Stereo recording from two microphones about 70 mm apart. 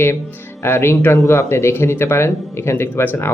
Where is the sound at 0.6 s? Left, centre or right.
Left.